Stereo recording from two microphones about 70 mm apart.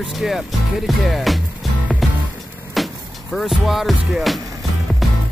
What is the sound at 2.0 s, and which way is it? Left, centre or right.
Music, centre.